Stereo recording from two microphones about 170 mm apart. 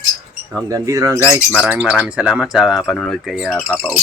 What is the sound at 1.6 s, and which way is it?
Speech, 5° right (ahead or behind).